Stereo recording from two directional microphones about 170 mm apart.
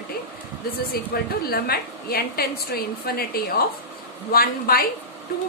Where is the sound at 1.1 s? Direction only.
65° left (ahead or behind).